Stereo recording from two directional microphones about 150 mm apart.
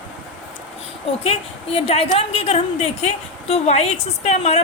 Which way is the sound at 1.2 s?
40° left (ahead or behind).